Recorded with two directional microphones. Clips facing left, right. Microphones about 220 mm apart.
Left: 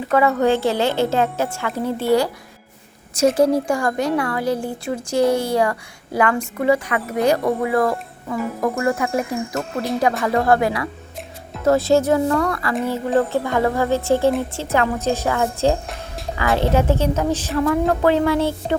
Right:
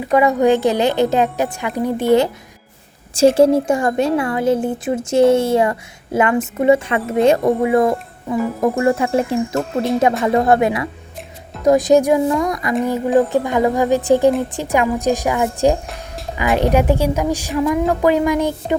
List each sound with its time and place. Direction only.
0.0 s a woman's voice: 15° right (ahead or behind)